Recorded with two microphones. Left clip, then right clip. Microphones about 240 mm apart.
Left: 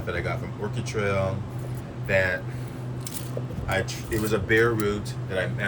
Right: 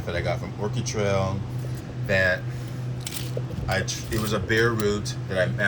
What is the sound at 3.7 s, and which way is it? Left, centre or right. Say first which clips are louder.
Speech: even; centre.